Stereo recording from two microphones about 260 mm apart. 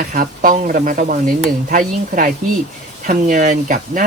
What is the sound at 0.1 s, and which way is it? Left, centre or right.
Speech, right.